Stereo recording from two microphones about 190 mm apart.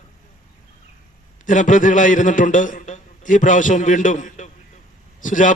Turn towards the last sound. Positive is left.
turn(degrees=45)  # may be behind; listen again after turning